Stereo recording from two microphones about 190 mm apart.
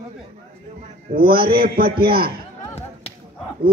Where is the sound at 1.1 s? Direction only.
50° right (ahead or behind).